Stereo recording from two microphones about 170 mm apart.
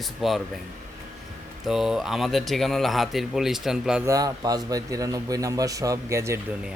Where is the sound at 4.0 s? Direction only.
20° right (ahead or behind).